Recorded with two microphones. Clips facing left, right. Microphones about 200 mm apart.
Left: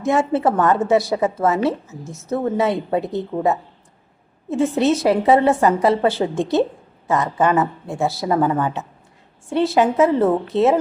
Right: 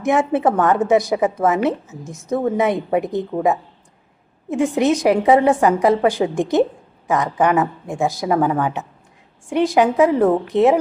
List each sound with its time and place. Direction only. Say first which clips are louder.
0.0 s a woman's voice: right 1 dB; 15° right (ahead or behind)
4.4 s a woman's voice: even; 15° right (ahead or behind)